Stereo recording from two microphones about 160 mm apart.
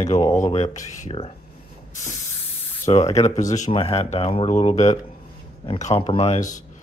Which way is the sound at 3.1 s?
45° left (ahead or behind).